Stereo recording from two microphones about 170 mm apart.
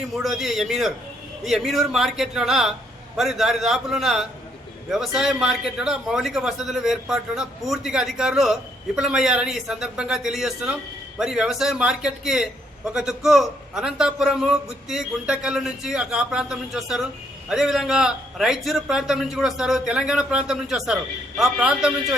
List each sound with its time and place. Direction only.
0.1 s a man's voice: centre (ahead or behind)